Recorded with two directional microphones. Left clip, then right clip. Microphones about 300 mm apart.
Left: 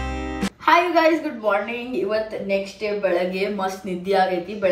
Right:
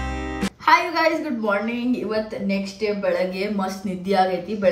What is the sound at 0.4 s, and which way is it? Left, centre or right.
A woman's voice, centre.